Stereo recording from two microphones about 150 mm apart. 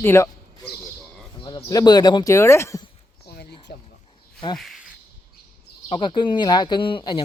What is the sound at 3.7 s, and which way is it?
Speech, 90° left.